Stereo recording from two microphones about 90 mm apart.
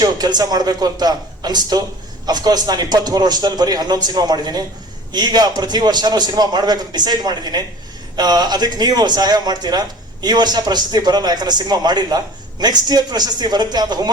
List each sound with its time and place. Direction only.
0.0 s a man's voice: 50° right (ahead or behind)